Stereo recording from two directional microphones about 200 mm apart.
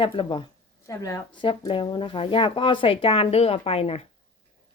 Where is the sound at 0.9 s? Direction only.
15° left (ahead or behind).